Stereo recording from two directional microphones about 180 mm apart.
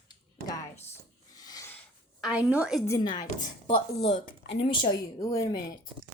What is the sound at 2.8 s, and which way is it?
Speech, 20° left (ahead or behind).